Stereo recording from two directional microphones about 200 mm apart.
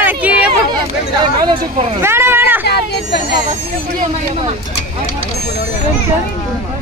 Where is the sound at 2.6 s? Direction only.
55° left (ahead or behind).